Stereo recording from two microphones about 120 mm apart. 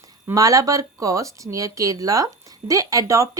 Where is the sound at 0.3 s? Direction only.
30° right (ahead or behind).